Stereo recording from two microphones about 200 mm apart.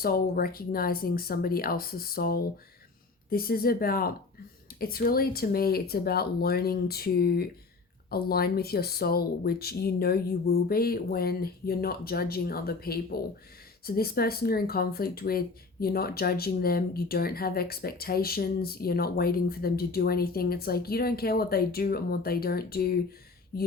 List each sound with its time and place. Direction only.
0.0 s speech: 50° left (ahead or behind)